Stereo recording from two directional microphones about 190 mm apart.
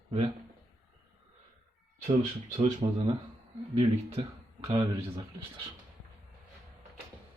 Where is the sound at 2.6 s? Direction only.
35° right (ahead or behind).